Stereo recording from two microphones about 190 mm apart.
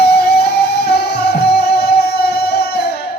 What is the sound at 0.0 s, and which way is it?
Music, 60° left (ahead or behind).